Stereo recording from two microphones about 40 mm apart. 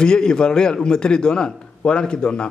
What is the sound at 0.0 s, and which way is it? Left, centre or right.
A man's voice, centre.